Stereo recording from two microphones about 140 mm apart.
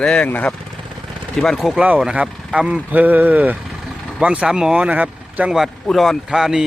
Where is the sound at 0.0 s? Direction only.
10° left (ahead or behind).